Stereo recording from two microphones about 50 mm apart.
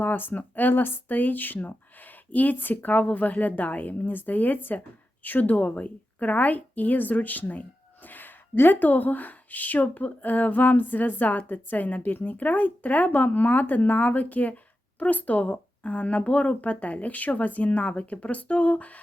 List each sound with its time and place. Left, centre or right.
0.0 s a woman's voice: left